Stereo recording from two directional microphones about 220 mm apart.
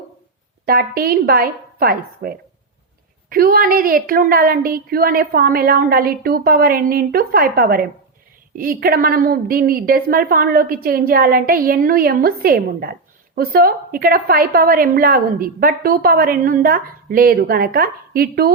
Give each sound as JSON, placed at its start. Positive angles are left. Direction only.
{"t": 0.6, "sound": "a woman's voice", "side_deg": -45}